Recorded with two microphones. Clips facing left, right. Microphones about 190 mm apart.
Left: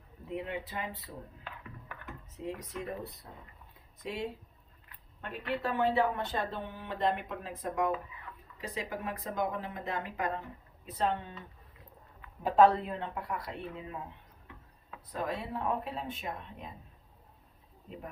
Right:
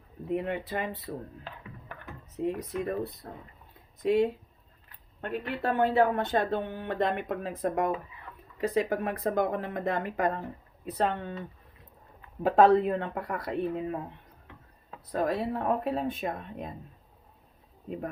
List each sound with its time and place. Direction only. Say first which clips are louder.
0.3 s speech: right 7 dB; 55° right (ahead or behind)
2.4 s speech: right 8 dB; 60° right (ahead or behind)
5.5 s speech: right 3 dB; 60° right (ahead or behind)
10.9 s speech: right 3 dB; 60° right (ahead or behind)
12.4 s speech: right 4 dB; 60° right (ahead or behind)
15.3 s speech: right 4 dB; 60° right (ahead or behind)
17.8 s speech: right 9 dB; 55° right (ahead or behind)